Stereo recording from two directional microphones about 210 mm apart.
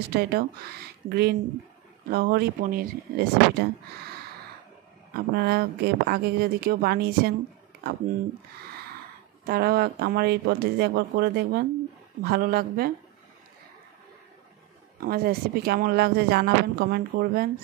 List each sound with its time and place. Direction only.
0.1 s speech: 50° right (ahead or behind)
5.1 s speech: 50° right (ahead or behind)
9.5 s speech: 45° right (ahead or behind)
15.0 s speech: 45° right (ahead or behind)